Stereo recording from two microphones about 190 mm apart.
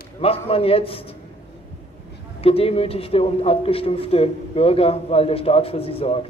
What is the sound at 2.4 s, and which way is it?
A man's voice, 30° left (ahead or behind).